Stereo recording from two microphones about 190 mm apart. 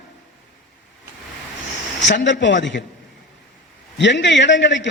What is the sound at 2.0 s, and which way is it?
Speech, 70° left (ahead or behind).